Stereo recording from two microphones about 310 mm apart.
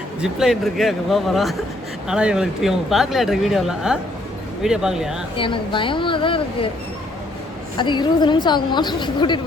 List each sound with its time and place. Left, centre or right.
0.2 s speech: centre
5.4 s a woman's voice: centre
7.8 s a woman's voice: centre